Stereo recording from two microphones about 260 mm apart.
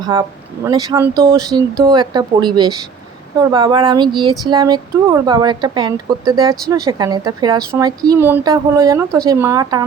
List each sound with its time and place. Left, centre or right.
0.0 s speech: centre